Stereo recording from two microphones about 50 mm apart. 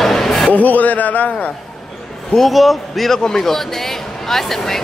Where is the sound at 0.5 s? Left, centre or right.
Left.